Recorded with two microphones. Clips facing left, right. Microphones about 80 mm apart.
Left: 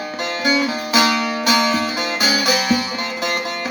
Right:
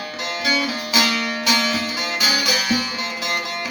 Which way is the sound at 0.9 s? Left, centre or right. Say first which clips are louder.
Left 5 dB; left.